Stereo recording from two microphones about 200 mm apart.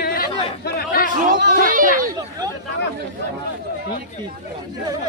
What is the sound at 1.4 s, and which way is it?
Speech, 45° right (ahead or behind).